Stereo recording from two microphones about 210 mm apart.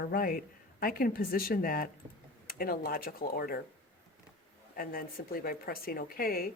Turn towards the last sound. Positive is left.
turn(degrees=45)  # may be behind; listen again after turning